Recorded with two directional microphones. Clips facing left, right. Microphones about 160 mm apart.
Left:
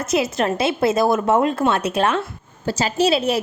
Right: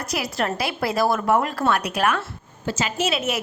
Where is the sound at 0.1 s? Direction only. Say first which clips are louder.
Left 6 dB; 20° left (ahead or behind).